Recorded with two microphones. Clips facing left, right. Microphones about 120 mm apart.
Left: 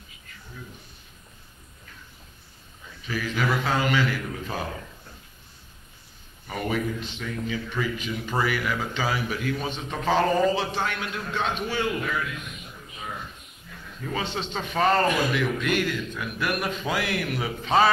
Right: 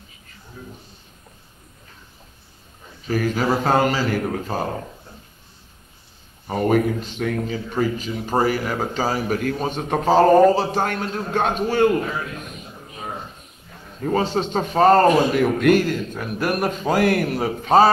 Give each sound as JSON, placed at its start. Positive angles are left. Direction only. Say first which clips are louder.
{"t": 3.1, "sound": "a man's voice", "louder": "right 6 dB", "side_deg": -45}
{"t": 6.4, "sound": "speech", "louder": "right 9 dB", "side_deg": -35}
{"t": 6.7, "sound": "a man's voice", "louder": "right 9 dB", "side_deg": -50}
{"t": 7.5, "sound": "a man's voice", "louder": "right 6 dB", "side_deg": -40}